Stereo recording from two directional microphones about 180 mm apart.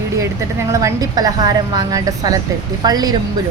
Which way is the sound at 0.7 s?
15° right (ahead or behind).